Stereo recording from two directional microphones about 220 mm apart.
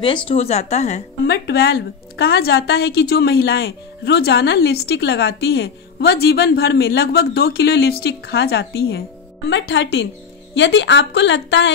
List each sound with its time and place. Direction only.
0.3 s speech: 30° left (ahead or behind)
1.2 s a woman's voice: 45° left (ahead or behind)